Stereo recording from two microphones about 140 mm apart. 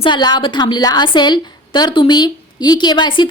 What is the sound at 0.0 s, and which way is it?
A woman's voice, 30° left (ahead or behind).